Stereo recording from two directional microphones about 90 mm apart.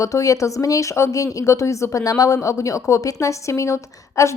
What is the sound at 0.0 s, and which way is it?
Speech, 40° left (ahead or behind).